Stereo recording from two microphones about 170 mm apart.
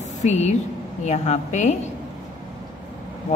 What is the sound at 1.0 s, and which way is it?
Speech, 45° left (ahead or behind).